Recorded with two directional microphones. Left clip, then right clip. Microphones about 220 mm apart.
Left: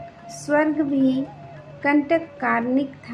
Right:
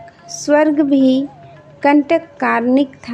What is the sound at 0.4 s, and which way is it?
A woman's voice, 40° right (ahead or behind).